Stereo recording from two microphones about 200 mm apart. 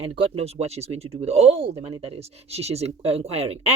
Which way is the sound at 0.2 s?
30° right (ahead or behind).